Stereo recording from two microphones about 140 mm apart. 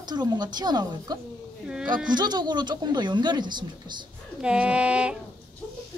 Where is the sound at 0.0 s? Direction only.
30° right (ahead or behind).